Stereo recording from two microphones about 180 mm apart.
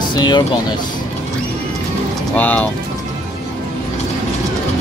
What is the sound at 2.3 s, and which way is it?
Speech, 10° left (ahead or behind).